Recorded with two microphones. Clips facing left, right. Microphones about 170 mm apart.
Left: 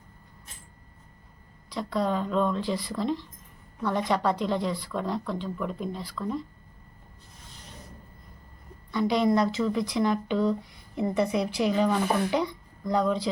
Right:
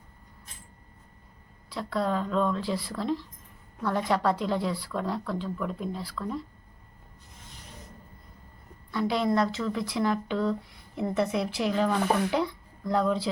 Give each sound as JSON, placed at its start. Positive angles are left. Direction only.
{"t": 1.7, "sound": "speech", "side_deg": -5}
{"t": 8.9, "sound": "speech", "side_deg": -5}